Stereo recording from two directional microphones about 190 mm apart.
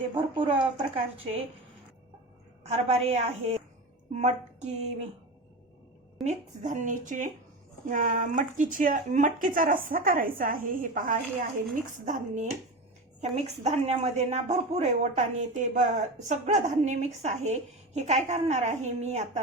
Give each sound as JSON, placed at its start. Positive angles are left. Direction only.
{"t": 0.1, "sound": "speech", "side_deg": -25}
{"t": 2.6, "sound": "speech", "side_deg": -35}
{"t": 6.2, "sound": "a woman's voice", "side_deg": -40}